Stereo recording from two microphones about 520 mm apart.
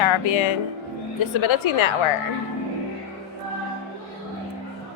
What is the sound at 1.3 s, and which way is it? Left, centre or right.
Speech, left.